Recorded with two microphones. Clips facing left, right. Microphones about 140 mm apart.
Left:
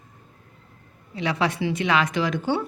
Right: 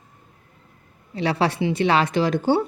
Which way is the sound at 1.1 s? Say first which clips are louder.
Right 3 dB; 35° right (ahead or behind).